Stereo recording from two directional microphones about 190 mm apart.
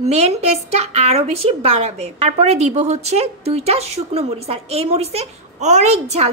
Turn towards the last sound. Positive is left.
turn(degrees=-35)  # may be behind; listen again after turning